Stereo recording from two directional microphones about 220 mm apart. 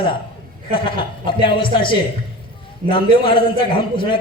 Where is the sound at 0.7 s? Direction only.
20° left (ahead or behind).